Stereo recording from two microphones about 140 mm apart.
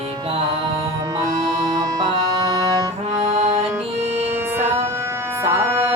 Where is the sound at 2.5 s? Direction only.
25° right (ahead or behind).